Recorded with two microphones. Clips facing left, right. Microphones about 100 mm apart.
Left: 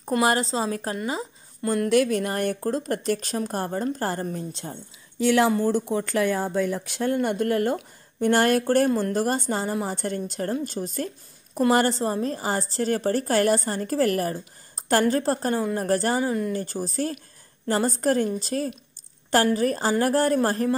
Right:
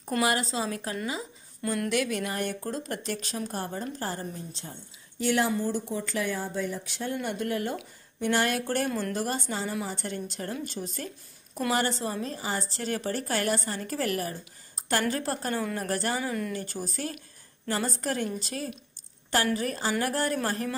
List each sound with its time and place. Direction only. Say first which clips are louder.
0.2 s a woman's voice: left 4 dB; 35° left (ahead or behind)